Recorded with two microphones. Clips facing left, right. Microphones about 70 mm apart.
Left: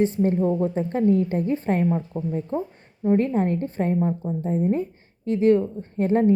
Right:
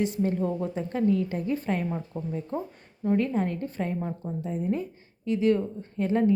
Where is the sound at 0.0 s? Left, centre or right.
Left.